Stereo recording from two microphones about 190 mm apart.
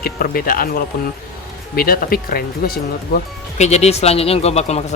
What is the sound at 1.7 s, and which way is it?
Speech, 50° left (ahead or behind).